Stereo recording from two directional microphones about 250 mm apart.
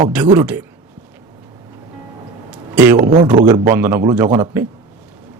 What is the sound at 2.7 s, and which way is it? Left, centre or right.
Speech, centre.